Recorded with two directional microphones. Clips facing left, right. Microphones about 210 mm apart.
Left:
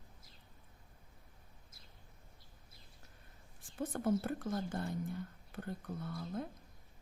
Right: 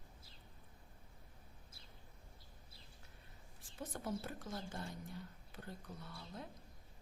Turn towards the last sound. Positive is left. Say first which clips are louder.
# left 10 dB
turn(degrees=50)  # may be behind; listen again after turning